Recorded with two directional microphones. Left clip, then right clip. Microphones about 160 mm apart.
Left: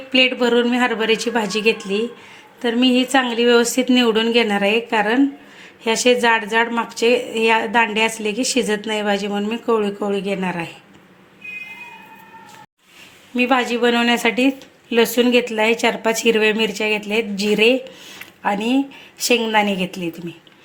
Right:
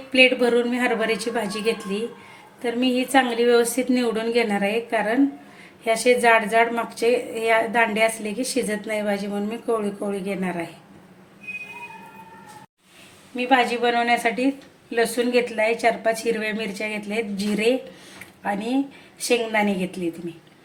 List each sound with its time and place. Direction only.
0.1 s a woman's voice: 25° left (ahead or behind)
13.3 s a woman's voice: 40° left (ahead or behind)